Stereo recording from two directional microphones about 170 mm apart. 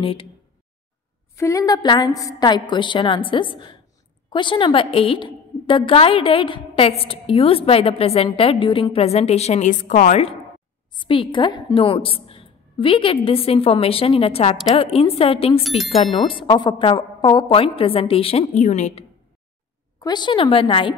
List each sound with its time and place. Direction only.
0.0 s a woman's voice: 30° left (ahead or behind)
1.3 s a woman's voice: 20° left (ahead or behind); by 10.2 s 50° left (ahead or behind)
10.9 s a woman's voice: 30° left (ahead or behind)
15.8 s speech: centre (ahead or behind)
16.2 s a woman's voice: 30° left (ahead or behind)
20.0 s a woman's voice: 25° left (ahead or behind)